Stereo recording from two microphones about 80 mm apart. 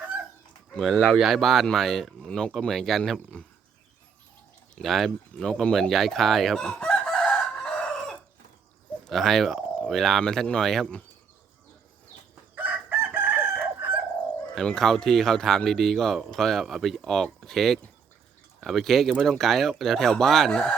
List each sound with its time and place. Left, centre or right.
0.7 s speech: centre
4.7 s a sound: centre
9.0 s speech: centre
12.5 s chicken: right
14.5 s speech: centre